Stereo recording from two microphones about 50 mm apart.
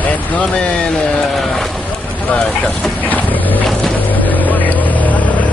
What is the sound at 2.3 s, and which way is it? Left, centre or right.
Speech, left.